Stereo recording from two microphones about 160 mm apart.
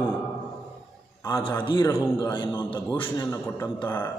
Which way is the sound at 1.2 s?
25° left (ahead or behind).